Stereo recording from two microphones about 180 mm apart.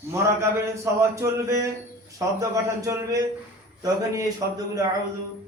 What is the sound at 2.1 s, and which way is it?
Speech, 20° right (ahead or behind).